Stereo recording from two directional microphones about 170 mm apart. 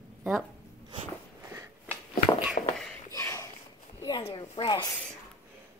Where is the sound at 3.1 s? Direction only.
20° left (ahead or behind).